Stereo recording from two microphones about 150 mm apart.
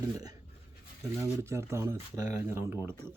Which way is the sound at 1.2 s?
20° right (ahead or behind).